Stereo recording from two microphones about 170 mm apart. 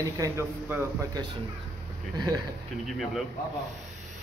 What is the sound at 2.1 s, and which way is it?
Speech, 20° right (ahead or behind).